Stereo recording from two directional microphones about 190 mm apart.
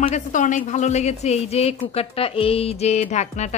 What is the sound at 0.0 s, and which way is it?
A woman's voice, 40° left (ahead or behind).